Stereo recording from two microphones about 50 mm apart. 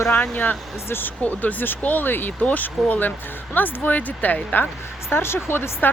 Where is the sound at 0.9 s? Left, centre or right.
Left.